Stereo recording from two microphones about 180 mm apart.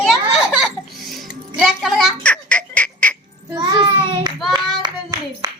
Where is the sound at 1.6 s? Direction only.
Centre (ahead or behind).